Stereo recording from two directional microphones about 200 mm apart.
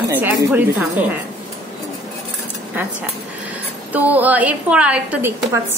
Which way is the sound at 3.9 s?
10° right (ahead or behind).